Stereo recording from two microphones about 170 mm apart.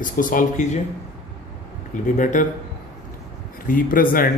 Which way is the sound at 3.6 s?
55° left (ahead or behind).